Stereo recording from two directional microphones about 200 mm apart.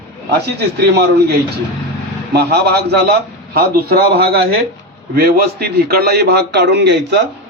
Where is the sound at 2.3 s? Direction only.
55° right (ahead or behind).